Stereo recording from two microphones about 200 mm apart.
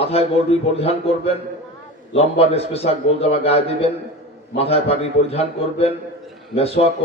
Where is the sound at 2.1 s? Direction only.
30° left (ahead or behind).